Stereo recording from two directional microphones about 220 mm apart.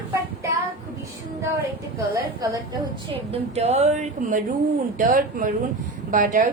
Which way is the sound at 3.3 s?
30° right (ahead or behind).